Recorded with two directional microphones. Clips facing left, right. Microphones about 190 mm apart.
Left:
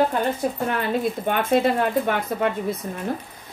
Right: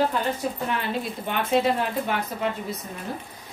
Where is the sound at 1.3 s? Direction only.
45° left (ahead or behind).